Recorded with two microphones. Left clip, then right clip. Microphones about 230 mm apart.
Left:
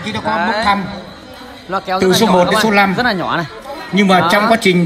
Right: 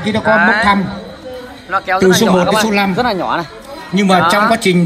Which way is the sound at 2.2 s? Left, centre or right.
Left.